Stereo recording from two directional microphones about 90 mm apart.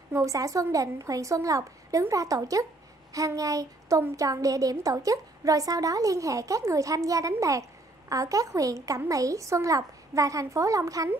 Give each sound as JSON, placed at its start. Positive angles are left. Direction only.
{"t": 0.1, "sound": "a woman's voice", "side_deg": -35}
{"t": 3.1, "sound": "a sound", "side_deg": -40}
{"t": 4.2, "sound": "a woman's voice", "side_deg": -40}